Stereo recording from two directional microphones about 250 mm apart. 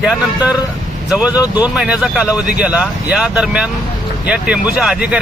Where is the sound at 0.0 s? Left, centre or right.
Centre.